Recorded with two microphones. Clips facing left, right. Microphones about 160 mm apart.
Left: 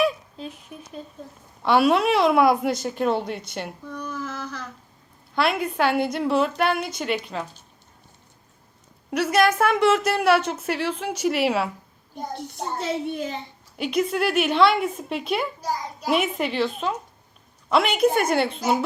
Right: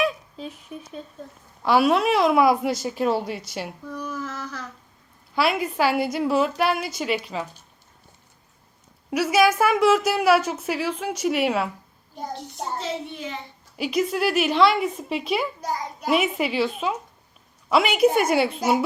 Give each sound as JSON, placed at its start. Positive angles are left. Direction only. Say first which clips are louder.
{"t": 0.0, "sound": "a woman's voice", "louder": "left 2 dB", "side_deg": 0}
{"t": 9.0, "sound": "a woman's voice", "louder": "right 1 dB", "side_deg": 0}
{"t": 12.8, "sound": "speech", "louder": "left 4 dB", "side_deg": 45}
{"t": 13.7, "sound": "a woman's voice", "louder": "even", "side_deg": 0}